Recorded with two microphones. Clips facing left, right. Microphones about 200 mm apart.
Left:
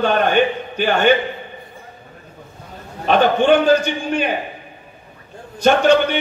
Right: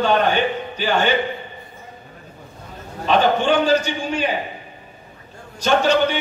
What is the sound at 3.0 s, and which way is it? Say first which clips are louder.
A man's voice: left 2 dB; 55° left (ahead or behind).